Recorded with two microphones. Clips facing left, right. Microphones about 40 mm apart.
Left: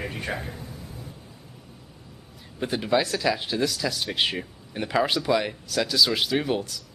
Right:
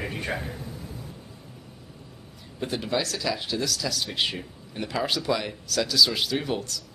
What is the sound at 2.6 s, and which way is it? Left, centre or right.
Speech, centre.